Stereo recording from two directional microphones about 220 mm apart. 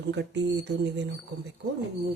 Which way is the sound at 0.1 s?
50° right (ahead or behind).